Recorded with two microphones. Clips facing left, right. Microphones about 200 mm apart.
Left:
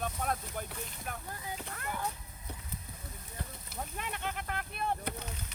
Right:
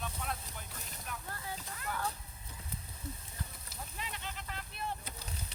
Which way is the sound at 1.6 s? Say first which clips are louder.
Left 4 dB; 60° left (ahead or behind).